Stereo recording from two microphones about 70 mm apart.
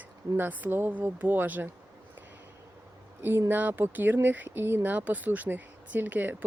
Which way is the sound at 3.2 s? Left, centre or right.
Right.